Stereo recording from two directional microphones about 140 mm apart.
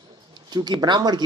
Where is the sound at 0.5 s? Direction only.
30° right (ahead or behind).